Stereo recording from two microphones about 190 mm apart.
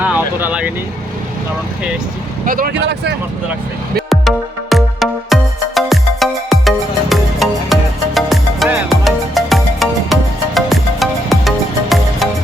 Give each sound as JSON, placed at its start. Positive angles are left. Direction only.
{"t": 0.0, "sound": "speech", "side_deg": -10}
{"t": 2.5, "sound": "speech", "side_deg": -50}
{"t": 4.1, "sound": "music", "side_deg": 0}